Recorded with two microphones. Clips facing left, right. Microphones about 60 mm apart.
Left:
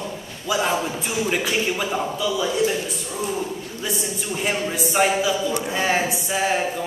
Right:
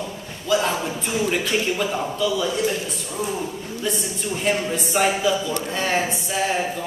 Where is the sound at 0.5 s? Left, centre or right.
Centre.